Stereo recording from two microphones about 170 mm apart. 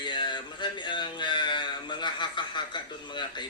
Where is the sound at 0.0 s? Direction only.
25° left (ahead or behind).